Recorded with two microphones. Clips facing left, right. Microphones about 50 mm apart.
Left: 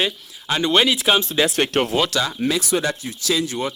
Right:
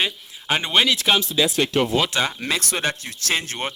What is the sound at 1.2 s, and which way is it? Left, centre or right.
Speech, left.